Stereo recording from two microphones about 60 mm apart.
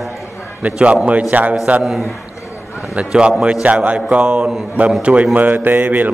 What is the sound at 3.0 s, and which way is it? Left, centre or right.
A man's voice, centre.